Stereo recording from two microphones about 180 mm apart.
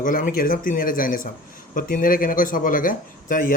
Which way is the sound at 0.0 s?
50° left (ahead or behind).